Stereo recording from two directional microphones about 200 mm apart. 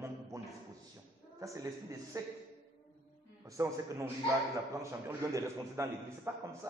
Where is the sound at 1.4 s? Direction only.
15° right (ahead or behind).